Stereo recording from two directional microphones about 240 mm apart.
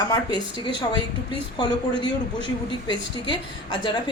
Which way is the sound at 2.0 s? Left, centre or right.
Centre.